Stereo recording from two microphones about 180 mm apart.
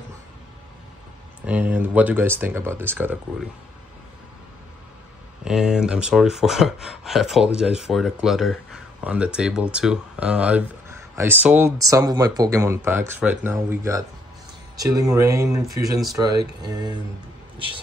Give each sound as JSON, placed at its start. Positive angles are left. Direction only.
{"t": 1.4, "sound": "speech", "side_deg": -10}
{"t": 5.4, "sound": "speech", "side_deg": -5}